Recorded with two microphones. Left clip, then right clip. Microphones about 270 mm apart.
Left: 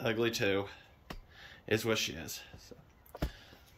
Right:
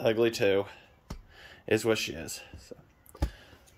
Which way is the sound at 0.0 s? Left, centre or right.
Centre.